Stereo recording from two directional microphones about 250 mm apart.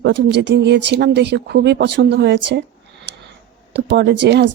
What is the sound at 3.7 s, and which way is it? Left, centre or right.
Speech, right.